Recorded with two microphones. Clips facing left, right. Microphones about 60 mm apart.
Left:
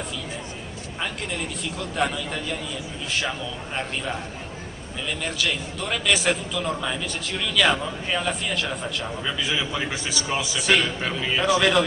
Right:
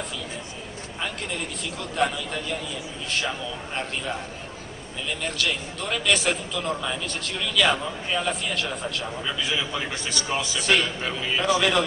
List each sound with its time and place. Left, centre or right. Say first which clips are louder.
1.8 s a man's voice: right 1 dB; centre
5.2 s a man's voice: even; centre